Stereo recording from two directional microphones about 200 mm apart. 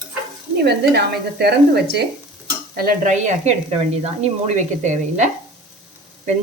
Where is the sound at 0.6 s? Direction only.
55° right (ahead or behind).